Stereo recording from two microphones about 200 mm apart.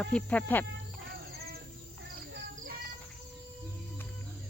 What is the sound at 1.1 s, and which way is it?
Cricket, 50° right (ahead or behind).